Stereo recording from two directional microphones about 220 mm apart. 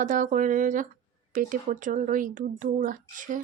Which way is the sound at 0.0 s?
35° right (ahead or behind).